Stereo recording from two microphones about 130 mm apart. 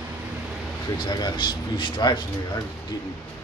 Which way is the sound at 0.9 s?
35° left (ahead or behind).